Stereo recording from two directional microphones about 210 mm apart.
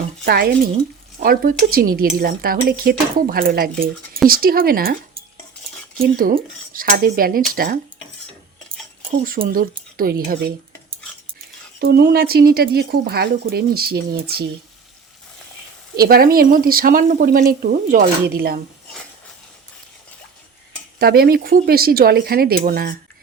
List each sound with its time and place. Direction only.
0.3 s speech: 50° right (ahead or behind)
6.0 s speech: 40° right (ahead or behind)
9.5 s speech: 45° right (ahead or behind)
11.8 s speech: 50° right (ahead or behind)
16.0 s speech: 45° right (ahead or behind)
21.0 s speech: 45° right (ahead or behind)